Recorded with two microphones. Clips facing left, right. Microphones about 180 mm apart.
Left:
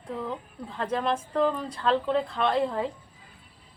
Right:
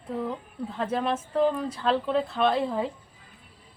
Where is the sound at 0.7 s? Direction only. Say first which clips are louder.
Even; 5° right (ahead or behind).